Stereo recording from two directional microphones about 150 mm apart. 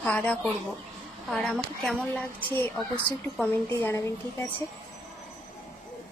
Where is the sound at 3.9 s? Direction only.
20° left (ahead or behind).